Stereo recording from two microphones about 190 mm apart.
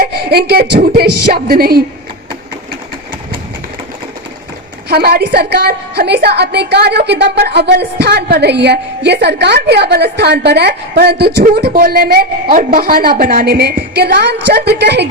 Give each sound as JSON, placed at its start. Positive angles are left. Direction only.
{"t": 0.0, "sound": "a woman's voice", "side_deg": -55}
{"t": 4.9, "sound": "a woman's voice", "side_deg": -55}